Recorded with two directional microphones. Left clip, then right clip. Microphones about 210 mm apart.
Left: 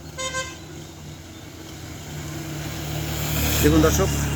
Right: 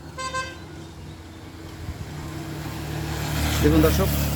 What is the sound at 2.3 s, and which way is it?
Vehicle, 50° left (ahead or behind).